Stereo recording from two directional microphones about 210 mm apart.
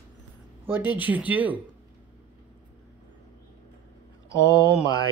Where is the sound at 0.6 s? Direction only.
10° right (ahead or behind).